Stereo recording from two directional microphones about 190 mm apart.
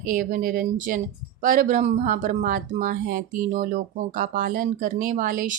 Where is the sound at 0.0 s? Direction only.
45° right (ahead or behind).